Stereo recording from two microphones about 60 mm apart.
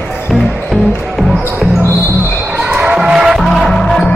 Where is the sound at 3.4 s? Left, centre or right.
Centre.